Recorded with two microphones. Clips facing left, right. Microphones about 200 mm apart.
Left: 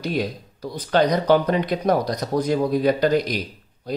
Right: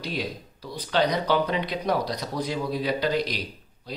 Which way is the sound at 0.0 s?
45° left (ahead or behind).